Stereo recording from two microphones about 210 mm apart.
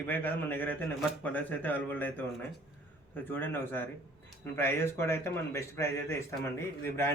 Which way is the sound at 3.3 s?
10° left (ahead or behind).